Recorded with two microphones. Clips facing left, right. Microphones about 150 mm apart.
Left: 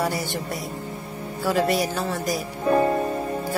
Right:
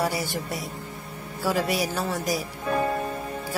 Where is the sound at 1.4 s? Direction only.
5° right (ahead or behind).